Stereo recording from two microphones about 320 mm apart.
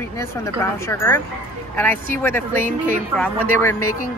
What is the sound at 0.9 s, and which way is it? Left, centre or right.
Speech, centre.